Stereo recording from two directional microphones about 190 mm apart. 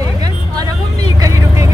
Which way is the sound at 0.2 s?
20° right (ahead or behind).